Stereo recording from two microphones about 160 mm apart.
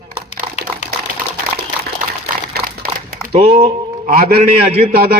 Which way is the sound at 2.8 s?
70° right (ahead or behind).